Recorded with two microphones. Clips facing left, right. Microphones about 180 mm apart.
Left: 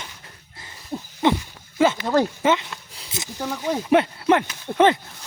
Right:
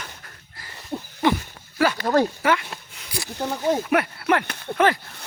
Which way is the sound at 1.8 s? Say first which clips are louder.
Left 3 dB; 20° left (ahead or behind).